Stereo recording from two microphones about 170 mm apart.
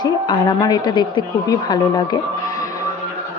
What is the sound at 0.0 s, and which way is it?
A woman's voice, 25° left (ahead or behind).